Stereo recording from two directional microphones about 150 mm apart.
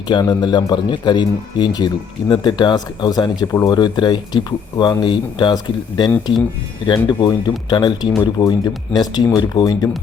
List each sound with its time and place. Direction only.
0.1 s a man's voice: 30° left (ahead or behind)